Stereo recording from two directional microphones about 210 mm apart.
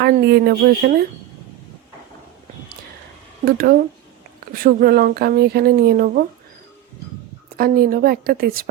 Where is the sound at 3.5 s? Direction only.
45° right (ahead or behind).